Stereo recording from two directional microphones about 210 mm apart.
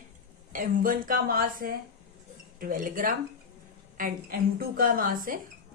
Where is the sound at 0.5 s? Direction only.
40° right (ahead or behind).